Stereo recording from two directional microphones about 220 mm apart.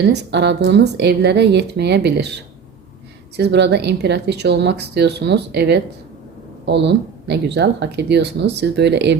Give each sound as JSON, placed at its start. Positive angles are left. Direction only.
{"t": 0.0, "sound": "speech", "side_deg": -50}
{"t": 3.3, "sound": "speech", "side_deg": -50}